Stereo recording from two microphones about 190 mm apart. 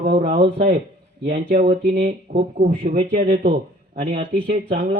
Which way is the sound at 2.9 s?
40° right (ahead or behind).